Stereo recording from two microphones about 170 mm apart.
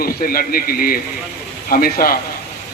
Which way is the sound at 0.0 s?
60° left (ahead or behind).